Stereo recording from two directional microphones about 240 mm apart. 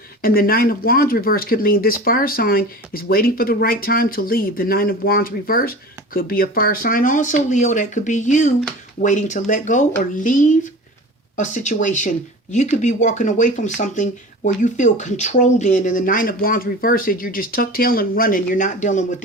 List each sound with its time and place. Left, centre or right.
0.2 s speech: left